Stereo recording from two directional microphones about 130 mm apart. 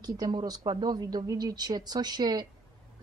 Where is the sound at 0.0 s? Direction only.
30° right (ahead or behind).